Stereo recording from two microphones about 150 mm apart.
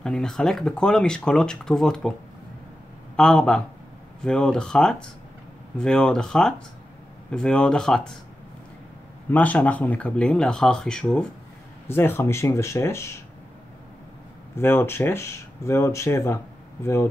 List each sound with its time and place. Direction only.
0.0 s speech: 5° left (ahead or behind)
3.2 s speech: 5° left (ahead or behind)
9.3 s speech: 10° left (ahead or behind)
14.5 s speech: 15° left (ahead or behind)